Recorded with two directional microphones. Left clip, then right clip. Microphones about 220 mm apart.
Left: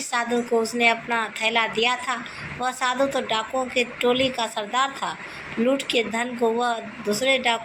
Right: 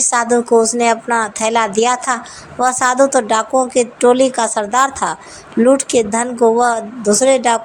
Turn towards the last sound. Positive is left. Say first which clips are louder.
# right 9 dB
turn(degrees=-40)  # may be behind; listen again after turning